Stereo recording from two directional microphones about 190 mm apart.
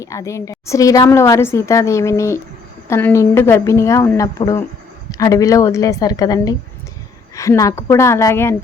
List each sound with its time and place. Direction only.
0.0 s a woman's voice: 15° left (ahead or behind)